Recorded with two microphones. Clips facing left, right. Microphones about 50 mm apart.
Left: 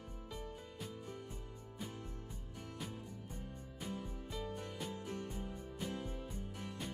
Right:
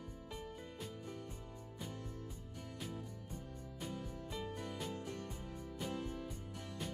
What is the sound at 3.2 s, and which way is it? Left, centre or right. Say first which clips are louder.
Music: even; left.